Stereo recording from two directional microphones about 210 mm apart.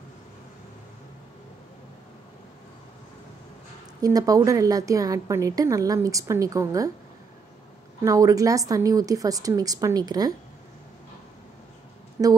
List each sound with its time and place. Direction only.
4.0 s a woman's voice: 15° right (ahead or behind)
8.0 s a woman's voice: 15° right (ahead or behind)
12.2 s a woman's voice: 10° right (ahead or behind)